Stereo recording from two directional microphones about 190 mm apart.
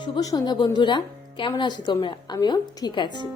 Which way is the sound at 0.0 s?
20° left (ahead or behind).